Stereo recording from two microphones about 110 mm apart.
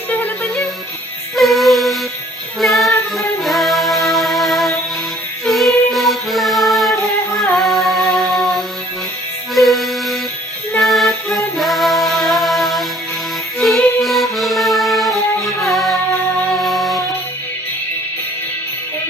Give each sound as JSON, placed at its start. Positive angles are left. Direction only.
{"t": 0.1, "sound": "music", "side_deg": 15}
{"t": 1.4, "sound": "music", "side_deg": 0}